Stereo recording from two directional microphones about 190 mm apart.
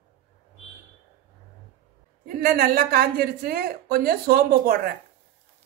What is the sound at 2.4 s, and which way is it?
A woman's voice, 50° right (ahead or behind).